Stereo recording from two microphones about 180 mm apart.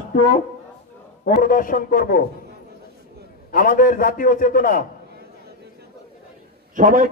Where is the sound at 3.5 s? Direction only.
50° left (ahead or behind).